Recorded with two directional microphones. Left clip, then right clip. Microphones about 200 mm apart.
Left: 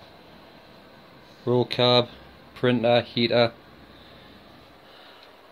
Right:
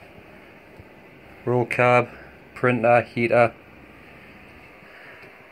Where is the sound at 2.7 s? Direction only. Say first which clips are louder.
Right 3 dB; 25° left (ahead or behind).